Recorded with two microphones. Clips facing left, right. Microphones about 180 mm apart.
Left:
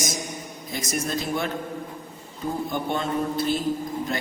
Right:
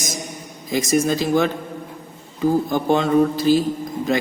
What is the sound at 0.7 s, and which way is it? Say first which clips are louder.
A man's voice: right 10 dB; 90° right.